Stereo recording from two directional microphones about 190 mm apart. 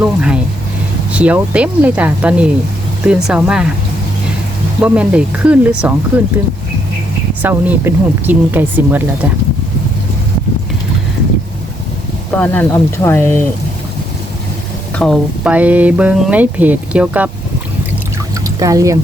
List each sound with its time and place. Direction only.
0.0 s speech: 5° right (ahead or behind)
4.8 s speech: 5° right (ahead or behind)
7.4 s speech: 10° right (ahead or behind)
12.3 s speech: 10° left (ahead or behind)
14.9 s speech: centre (ahead or behind)
18.4 s speech: 15° right (ahead or behind)